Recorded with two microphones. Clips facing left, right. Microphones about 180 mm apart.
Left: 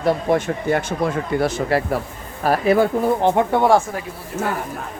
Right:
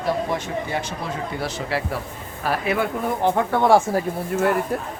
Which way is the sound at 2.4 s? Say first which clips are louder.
Left 7 dB; 40° left (ahead or behind).